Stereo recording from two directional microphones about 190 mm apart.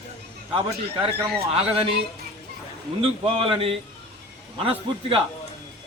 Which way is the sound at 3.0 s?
30° right (ahead or behind).